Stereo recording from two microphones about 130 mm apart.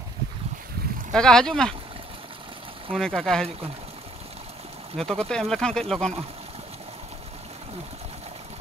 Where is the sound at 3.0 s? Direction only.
5° left (ahead or behind).